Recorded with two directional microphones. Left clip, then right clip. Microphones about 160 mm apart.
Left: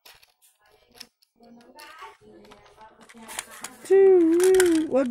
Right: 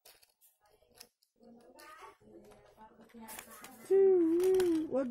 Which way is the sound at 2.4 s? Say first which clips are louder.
Left 8 dB; 45° right (ahead or behind).